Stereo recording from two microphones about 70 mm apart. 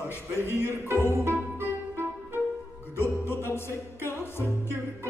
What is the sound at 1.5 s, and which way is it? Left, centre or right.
Music, right.